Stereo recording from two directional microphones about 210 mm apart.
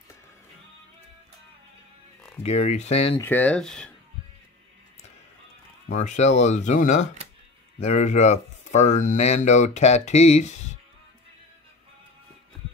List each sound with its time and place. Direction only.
2.4 s speech: 30° left (ahead or behind)
3.2 s speech: 10° left (ahead or behind)
5.9 s speech: 35° left (ahead or behind)